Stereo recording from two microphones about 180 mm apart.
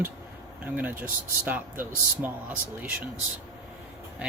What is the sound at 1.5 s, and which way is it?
Speech, 10° right (ahead or behind).